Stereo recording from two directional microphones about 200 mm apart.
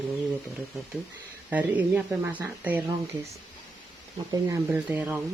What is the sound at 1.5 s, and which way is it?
Speech, 10° right (ahead or behind).